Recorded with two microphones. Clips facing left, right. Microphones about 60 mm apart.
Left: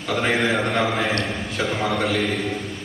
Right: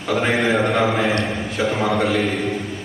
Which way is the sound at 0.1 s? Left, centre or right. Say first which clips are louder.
Right 2 dB; centre.